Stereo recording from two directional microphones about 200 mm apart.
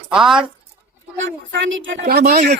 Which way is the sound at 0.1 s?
Centre (ahead or behind).